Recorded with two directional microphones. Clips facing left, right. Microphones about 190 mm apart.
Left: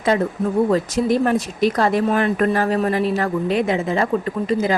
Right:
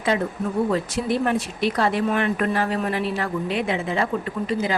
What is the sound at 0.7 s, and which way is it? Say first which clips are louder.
Speech: left 5 dB; 40° left (ahead or behind).